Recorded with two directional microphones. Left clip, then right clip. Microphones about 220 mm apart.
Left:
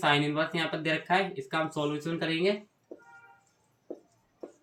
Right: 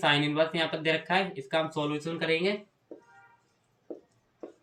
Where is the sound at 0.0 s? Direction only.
20° right (ahead or behind).